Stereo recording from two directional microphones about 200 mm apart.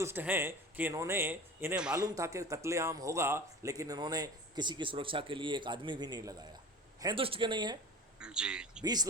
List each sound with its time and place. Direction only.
0.0 s a man's voice: 10° right (ahead or behind)
2.0 s speech: 15° right (ahead or behind)
8.2 s a man's voice: 5° right (ahead or behind)
8.8 s speech: 20° right (ahead or behind)